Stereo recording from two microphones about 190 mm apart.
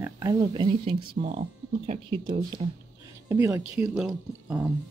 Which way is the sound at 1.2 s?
35° right (ahead or behind).